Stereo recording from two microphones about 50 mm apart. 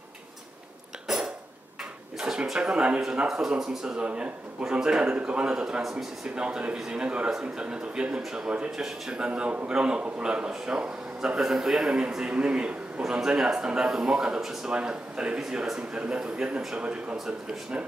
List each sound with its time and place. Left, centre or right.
1.1 s cough: centre
2.1 s a sound: centre
2.6 s a man's voice: right
3.3 s speech: centre
4.0 s a man's voice: right
5.8 s a man's voice: centre
6.3 s a man's voice: centre
9.1 s a man's voice: right
12.2 s a man's voice: right